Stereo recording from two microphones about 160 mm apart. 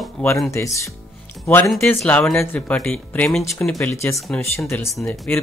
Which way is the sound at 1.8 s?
5° left (ahead or behind).